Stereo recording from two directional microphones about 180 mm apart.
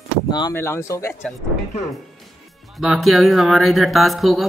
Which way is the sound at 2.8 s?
Centre (ahead or behind).